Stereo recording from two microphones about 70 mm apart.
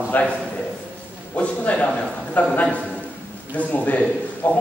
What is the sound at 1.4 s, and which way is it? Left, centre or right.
A man's voice, centre.